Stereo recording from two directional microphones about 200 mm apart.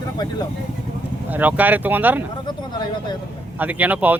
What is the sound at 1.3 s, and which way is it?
Speech, 10° right (ahead or behind).